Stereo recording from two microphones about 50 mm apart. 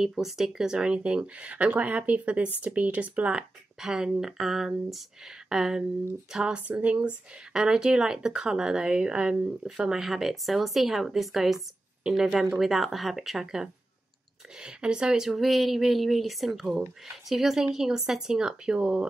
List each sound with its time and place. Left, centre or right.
0.0 s speech: centre; by 3.4 s right
3.8 s speech: centre; by 7.2 s right
7.5 s speech: centre
9.8 s speech: centre